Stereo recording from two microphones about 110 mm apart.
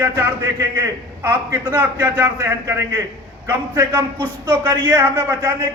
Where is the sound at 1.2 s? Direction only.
20° right (ahead or behind).